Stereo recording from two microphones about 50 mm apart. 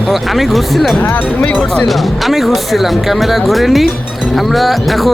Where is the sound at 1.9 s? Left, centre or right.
Centre.